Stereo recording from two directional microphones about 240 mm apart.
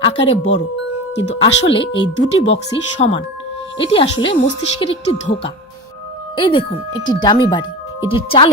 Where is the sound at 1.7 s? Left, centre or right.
Left.